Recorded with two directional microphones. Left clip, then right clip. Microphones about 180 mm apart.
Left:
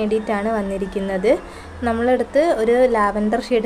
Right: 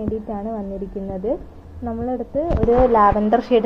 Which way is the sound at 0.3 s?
25° left (ahead or behind).